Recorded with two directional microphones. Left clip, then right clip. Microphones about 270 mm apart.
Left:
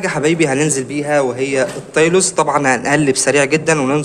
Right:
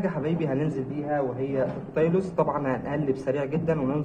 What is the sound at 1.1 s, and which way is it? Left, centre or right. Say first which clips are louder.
Speech: left 12 dB; left.